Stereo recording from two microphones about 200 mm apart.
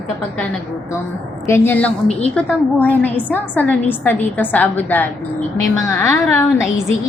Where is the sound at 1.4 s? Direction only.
10° left (ahead or behind).